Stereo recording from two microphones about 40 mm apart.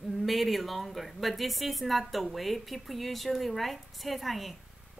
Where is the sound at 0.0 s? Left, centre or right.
Centre.